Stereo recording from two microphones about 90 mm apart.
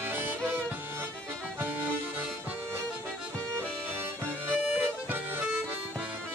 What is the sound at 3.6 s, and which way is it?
Music, 25° right (ahead or behind).